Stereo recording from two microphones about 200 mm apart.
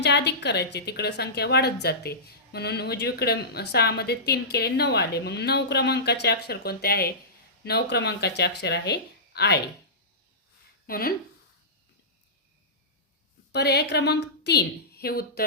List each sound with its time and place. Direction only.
0.0 s a woman's voice: 60° left (ahead or behind)
10.8 s speech: 50° left (ahead or behind)
13.5 s a woman's voice: 55° left (ahead or behind)